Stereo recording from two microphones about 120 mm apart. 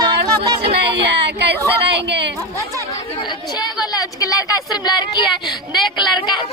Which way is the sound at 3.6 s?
35° left (ahead or behind).